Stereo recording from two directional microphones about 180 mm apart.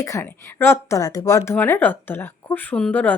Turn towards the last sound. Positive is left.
turn(degrees=10)  # may be behind; listen again after turning